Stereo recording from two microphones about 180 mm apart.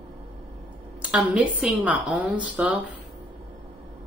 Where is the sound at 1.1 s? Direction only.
5° right (ahead or behind).